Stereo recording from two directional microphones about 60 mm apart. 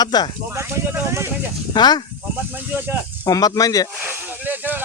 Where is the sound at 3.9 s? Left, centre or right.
Right.